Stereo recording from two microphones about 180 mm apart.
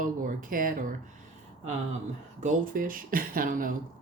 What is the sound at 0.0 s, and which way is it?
Speech, 50° right (ahead or behind).